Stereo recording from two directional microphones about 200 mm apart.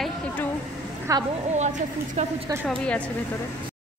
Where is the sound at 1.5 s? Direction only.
35° right (ahead or behind).